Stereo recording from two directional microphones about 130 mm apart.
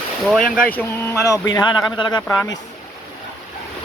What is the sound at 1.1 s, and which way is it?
Speech, 25° left (ahead or behind).